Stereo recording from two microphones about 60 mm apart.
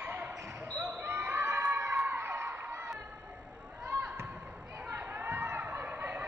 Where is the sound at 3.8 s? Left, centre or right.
Right.